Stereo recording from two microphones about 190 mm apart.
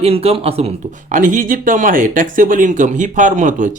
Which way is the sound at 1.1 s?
45° right (ahead or behind).